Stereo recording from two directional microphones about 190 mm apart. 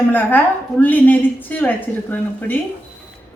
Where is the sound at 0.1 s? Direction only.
10° left (ahead or behind).